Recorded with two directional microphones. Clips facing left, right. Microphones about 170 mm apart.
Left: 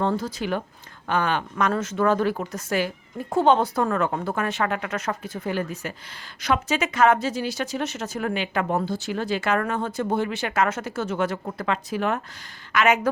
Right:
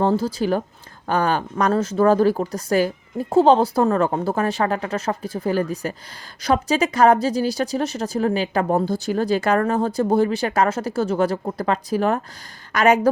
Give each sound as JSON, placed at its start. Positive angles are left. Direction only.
{"t": 0.0, "sound": "speech", "side_deg": -30}